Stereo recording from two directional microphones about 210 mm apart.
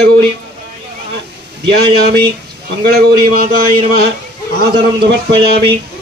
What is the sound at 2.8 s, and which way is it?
Speech, 50° right (ahead or behind).